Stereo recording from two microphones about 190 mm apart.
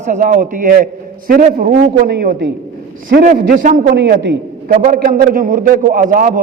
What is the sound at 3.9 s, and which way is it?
Speech, 65° right (ahead or behind).